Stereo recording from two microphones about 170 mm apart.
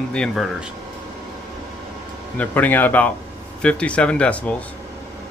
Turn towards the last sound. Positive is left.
turn(degrees=5)  # may be behind; listen again after turning